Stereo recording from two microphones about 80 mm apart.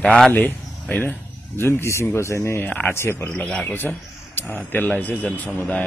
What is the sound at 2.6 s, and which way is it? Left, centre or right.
Speech, centre.